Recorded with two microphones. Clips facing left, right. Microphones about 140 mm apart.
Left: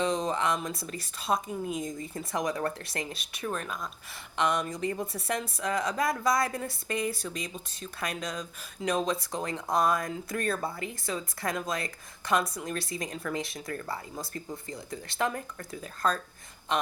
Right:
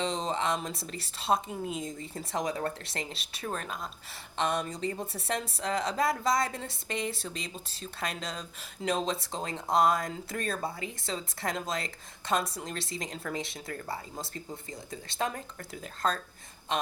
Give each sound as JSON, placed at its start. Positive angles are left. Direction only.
{"t": 0.0, "sound": "a woman's voice", "side_deg": -25}
{"t": 15.3, "sound": "speech", "side_deg": 30}